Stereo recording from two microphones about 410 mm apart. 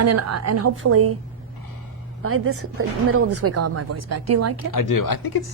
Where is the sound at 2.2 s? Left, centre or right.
Right.